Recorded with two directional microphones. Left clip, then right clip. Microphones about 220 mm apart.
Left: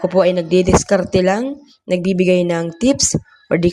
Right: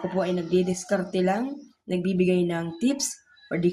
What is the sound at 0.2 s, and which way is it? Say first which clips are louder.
Speech: left 11 dB; 40° left (ahead or behind).